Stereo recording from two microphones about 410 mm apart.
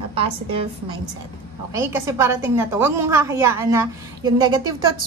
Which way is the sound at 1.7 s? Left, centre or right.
Centre.